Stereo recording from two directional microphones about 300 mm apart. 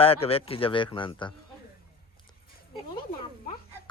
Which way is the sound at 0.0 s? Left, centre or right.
Centre.